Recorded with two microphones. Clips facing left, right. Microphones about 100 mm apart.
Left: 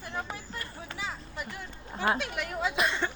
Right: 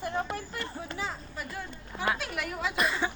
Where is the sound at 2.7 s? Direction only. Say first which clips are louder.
Right 1 dB; centre (ahead or behind).